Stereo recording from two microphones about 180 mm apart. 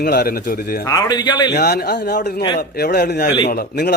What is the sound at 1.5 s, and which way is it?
A man's voice, 65° left (ahead or behind).